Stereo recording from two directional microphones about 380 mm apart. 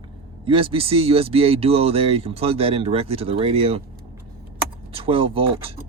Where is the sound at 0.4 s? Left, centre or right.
Centre.